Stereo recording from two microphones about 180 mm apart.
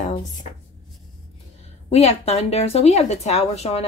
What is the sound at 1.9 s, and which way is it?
A woman's voice, 35° left (ahead or behind).